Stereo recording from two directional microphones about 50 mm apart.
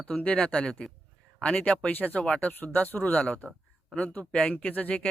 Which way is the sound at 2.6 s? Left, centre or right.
Left.